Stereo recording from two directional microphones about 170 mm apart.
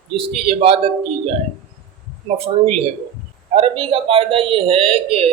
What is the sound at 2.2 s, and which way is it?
Speech, 35° right (ahead or behind).